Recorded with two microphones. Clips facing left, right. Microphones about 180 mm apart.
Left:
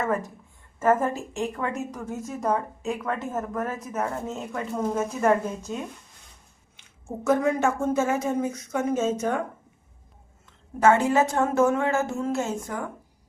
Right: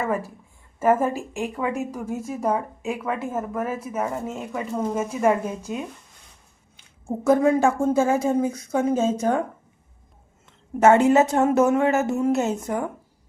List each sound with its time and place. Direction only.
0.0 s a woman's voice: 10° right (ahead or behind)
7.3 s a woman's voice: 30° right (ahead or behind)
10.8 s a woman's voice: 25° right (ahead or behind)